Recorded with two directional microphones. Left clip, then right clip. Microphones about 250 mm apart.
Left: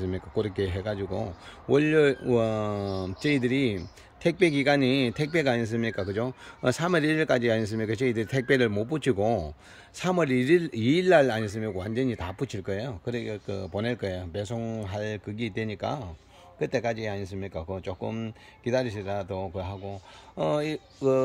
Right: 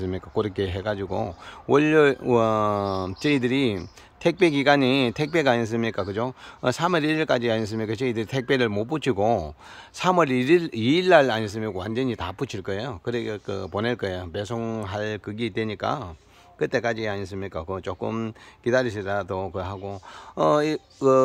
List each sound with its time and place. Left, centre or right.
0.0 s speech: centre